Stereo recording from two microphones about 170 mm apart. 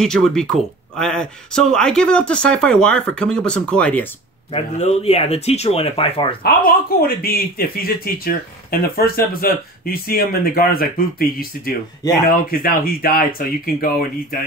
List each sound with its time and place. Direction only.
0.0 s speech: 5° left (ahead or behind)
4.5 s speech: 35° left (ahead or behind)
6.4 s speech: 60° left (ahead or behind)